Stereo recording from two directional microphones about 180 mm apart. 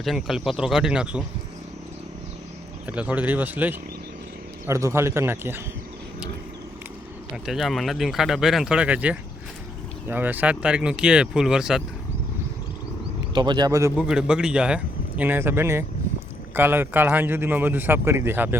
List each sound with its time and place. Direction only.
0.0 s speech: centre (ahead or behind)
2.8 s a man's voice: 5° right (ahead or behind)
7.4 s speech: centre (ahead or behind)
13.3 s speech: 25° right (ahead or behind)
14.1 s a man's voice: 5° right (ahead or behind)